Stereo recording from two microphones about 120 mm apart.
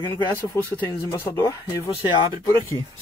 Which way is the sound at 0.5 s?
25° left (ahead or behind).